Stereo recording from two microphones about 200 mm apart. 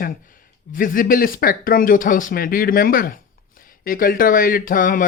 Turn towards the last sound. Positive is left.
turn(degrees=45)  # may be behind; listen again after turning